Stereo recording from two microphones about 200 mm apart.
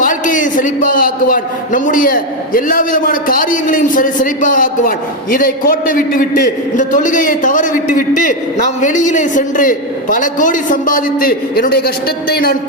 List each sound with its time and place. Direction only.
0.0 s a man's voice: 40° left (ahead or behind)